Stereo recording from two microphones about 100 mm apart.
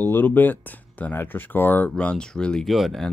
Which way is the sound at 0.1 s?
20° left (ahead or behind).